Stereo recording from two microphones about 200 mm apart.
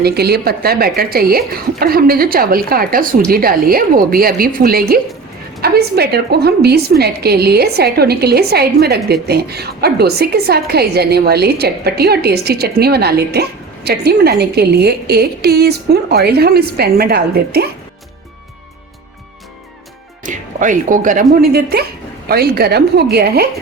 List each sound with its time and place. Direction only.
0.0 s a woman's voice: 55° right (ahead or behind)
20.2 s a woman's voice: 40° right (ahead or behind)